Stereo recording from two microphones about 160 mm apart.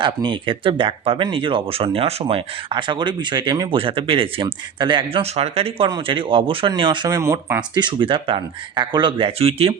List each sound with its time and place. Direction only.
0.0 s speech: 30° right (ahead or behind)